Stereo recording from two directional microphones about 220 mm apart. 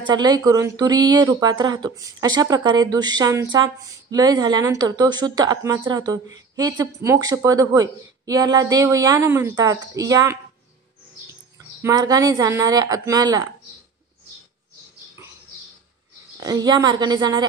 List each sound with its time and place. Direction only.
0.0 s speech: 20° right (ahead or behind)
11.8 s speech: 15° right (ahead or behind)
16.3 s a woman's voice: 20° right (ahead or behind)